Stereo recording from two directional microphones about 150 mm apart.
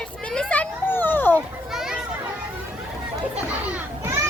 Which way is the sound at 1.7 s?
Centre (ahead or behind).